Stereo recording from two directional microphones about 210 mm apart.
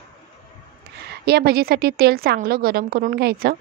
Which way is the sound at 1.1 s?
50° right (ahead or behind).